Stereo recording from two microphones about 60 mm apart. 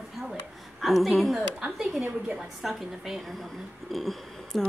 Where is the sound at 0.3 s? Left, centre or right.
Centre.